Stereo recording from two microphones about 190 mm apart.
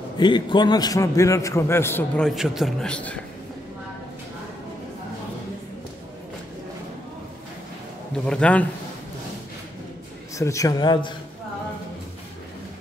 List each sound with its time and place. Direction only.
0.2 s a man's voice: 25° left (ahead or behind); by 3.2 s 5° left (ahead or behind)
8.3 s a man's voice: 5° left (ahead or behind)
10.3 s a man's voice: 15° left (ahead or behind)